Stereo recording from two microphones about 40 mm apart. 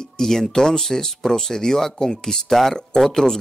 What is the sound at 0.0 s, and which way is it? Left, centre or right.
Speech, centre.